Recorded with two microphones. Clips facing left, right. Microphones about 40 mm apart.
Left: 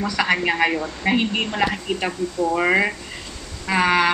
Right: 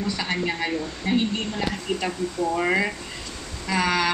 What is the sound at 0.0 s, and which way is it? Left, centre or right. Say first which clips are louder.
Speech: left 7 dB; left.